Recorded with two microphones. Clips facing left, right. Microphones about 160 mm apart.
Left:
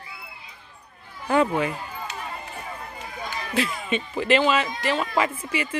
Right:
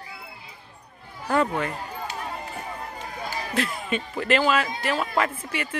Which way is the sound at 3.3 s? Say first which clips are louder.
Right 1 dB; 30° right (ahead or behind).